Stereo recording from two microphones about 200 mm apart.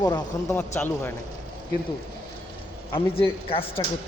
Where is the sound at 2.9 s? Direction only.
25° left (ahead or behind).